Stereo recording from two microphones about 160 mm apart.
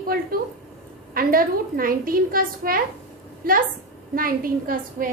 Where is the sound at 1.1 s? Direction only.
65° right (ahead or behind).